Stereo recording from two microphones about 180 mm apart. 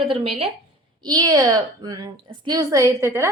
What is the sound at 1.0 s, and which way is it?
A woman's voice, 20° right (ahead or behind).